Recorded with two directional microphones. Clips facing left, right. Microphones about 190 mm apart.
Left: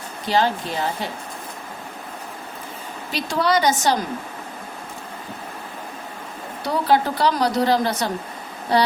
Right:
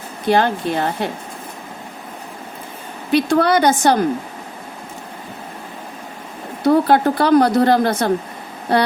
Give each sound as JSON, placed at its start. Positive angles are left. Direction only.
{"t": 0.3, "sound": "speech", "side_deg": -55}
{"t": 3.1, "sound": "speech", "side_deg": -55}
{"t": 6.7, "sound": "speech", "side_deg": -55}